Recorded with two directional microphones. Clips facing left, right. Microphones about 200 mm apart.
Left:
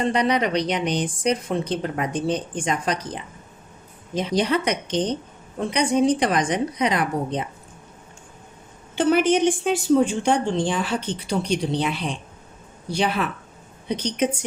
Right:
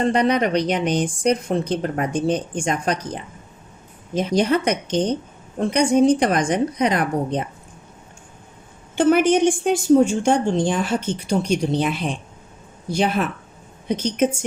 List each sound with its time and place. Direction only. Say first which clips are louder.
0.1 s a woman's voice: right 3 dB; 45° right (ahead or behind)
4.1 s a woman's voice: right 3 dB; 45° right (ahead or behind)
9.0 s a woman's voice: right 3 dB; 50° right (ahead or behind)